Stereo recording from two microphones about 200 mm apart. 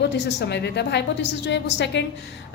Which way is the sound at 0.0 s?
60° left (ahead or behind).